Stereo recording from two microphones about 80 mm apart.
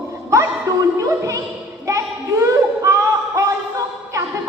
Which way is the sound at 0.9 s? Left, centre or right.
Right.